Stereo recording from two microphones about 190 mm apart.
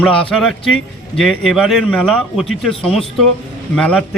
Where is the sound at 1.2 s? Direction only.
Centre (ahead or behind).